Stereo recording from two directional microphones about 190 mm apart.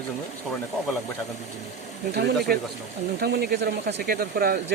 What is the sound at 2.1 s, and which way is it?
Speech, 55° right (ahead or behind).